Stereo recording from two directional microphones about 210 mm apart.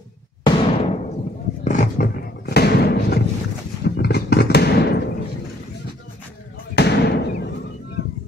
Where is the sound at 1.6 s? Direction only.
35° left (ahead or behind).